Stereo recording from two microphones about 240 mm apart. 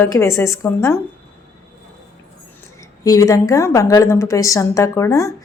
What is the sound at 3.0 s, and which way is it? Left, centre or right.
A woman's voice, centre.